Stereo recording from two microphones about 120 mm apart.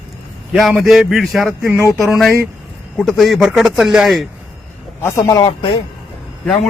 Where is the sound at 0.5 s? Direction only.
Centre (ahead or behind).